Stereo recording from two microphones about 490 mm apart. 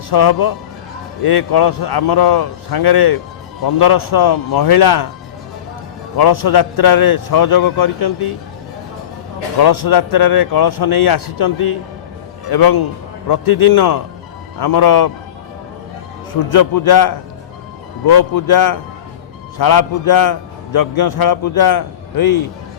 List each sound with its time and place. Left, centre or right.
0.1 s a man's voice: left
6.1 s a man's voice: left
9.6 s a man's voice: left
16.5 s a man's voice: left